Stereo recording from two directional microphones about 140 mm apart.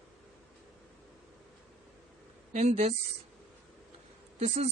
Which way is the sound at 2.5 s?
55° right (ahead or behind).